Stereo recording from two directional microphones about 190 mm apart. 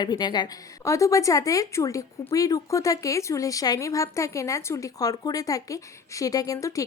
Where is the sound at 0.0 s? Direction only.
20° left (ahead or behind).